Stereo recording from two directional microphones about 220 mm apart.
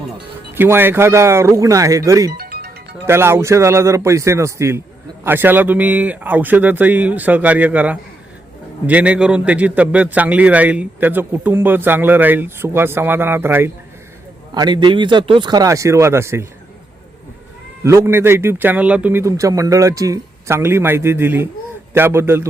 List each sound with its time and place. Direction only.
0.5 s a man's voice: 10° right (ahead or behind)
2.4 s music: 45° right (ahead or behind)
3.1 s a man's voice: 10° right (ahead or behind)
17.8 s a man's voice: 10° right (ahead or behind)